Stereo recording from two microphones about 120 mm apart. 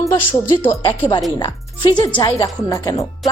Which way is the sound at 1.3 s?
40° left (ahead or behind).